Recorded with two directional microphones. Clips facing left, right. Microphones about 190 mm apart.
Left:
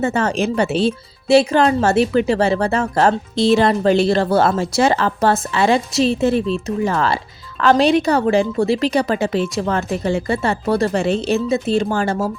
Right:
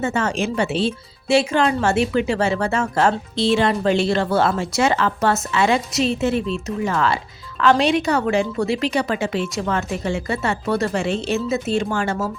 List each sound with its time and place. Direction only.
0.0 s speech: 35° left (ahead or behind)